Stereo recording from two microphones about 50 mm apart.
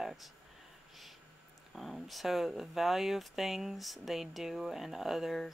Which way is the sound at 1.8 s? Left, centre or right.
Centre.